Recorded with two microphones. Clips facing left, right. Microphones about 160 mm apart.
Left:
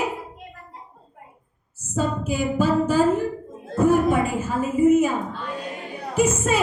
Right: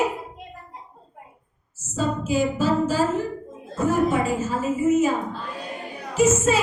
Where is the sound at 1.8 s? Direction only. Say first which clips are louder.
Left 1 dB; 55° left (ahead or behind).